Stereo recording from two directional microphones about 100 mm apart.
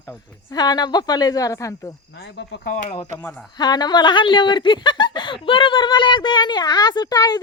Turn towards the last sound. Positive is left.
turn(degrees=40)  # may be behind; listen again after turning